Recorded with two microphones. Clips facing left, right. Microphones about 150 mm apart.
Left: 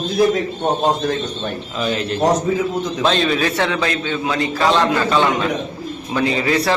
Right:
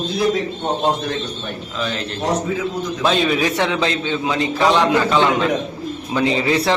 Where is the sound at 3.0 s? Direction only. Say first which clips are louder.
Right 1 dB; 10° right (ahead or behind).